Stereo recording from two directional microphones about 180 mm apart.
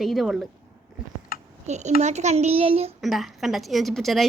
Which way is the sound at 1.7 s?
40° right (ahead or behind).